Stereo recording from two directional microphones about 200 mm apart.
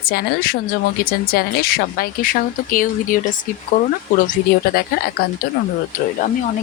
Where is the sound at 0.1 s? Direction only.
50° left (ahead or behind).